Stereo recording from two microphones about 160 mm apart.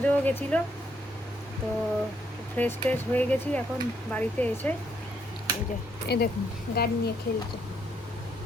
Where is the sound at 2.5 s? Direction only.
10° left (ahead or behind).